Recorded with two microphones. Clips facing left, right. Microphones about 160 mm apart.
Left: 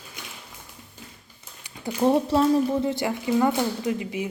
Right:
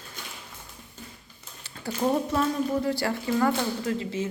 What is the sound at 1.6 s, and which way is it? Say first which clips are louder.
Speech: left 4 dB; 20° left (ahead or behind).